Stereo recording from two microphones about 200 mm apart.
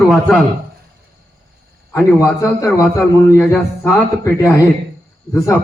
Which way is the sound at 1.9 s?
15° left (ahead or behind).